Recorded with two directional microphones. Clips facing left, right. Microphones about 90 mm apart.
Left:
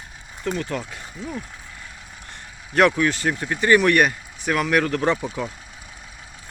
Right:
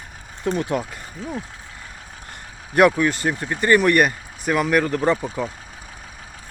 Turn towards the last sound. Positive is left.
turn(degrees=-5)  # may be behind; listen again after turning